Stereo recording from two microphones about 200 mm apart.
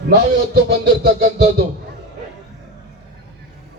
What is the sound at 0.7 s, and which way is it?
Speech, 50° right (ahead or behind).